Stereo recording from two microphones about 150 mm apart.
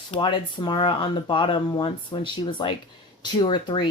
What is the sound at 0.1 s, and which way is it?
A woman's voice, 30° left (ahead or behind).